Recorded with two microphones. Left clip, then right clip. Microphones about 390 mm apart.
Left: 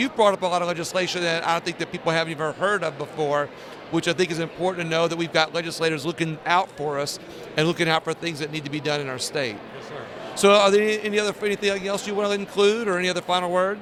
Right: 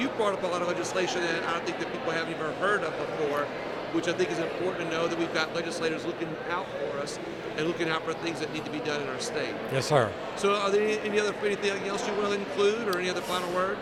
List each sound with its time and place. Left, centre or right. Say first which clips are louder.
0.0 s speech: left 8 dB; left
3.9 s speech: left 6 dB; left
7.5 s a man's voice: left 8 dB; left